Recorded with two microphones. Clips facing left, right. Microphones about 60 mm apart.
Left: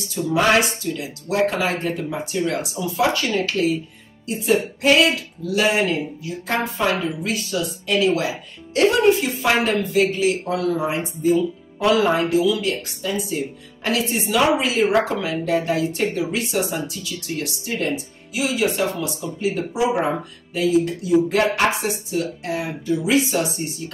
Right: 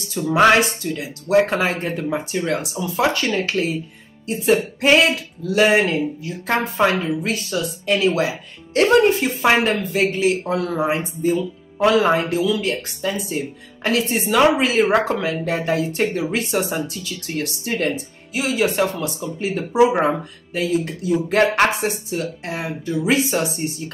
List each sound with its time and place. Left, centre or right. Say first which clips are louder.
0.1 s speech: right 3 dB; right